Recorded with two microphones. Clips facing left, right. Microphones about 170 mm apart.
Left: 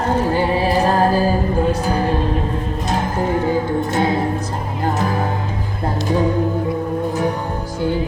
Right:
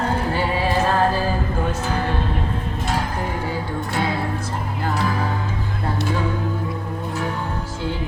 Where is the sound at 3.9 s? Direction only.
45° left (ahead or behind).